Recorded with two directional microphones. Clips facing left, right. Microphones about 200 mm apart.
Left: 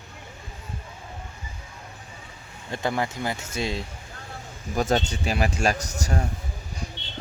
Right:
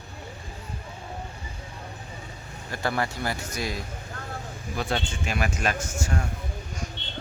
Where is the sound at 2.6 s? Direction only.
20° left (ahead or behind).